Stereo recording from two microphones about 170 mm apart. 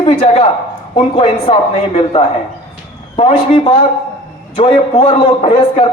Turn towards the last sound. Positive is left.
turn(degrees=30)  # may be behind; listen again after turning